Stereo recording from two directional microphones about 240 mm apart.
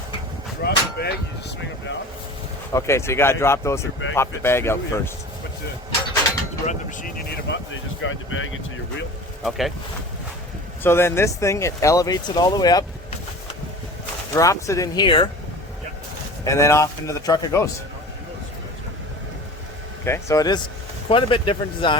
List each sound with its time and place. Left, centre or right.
0.6 s a sound: left
2.7 s speech: centre
7.3 s speech: left
9.4 s speech: centre
10.8 s speech: centre
14.3 s speech: centre
16.4 s speech: centre
20.1 s speech: centre